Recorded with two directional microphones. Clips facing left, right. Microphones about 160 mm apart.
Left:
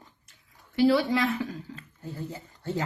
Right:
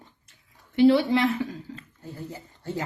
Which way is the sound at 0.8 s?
25° right (ahead or behind).